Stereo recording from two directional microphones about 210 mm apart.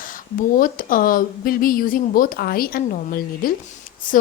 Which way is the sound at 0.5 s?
40° left (ahead or behind).